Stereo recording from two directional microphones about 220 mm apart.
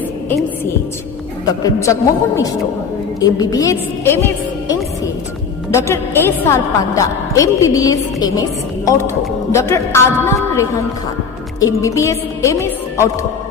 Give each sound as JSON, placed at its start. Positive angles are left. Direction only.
{"t": 0.3, "sound": "a woman's voice", "side_deg": 10}
{"t": 5.7, "sound": "a woman's voice", "side_deg": 10}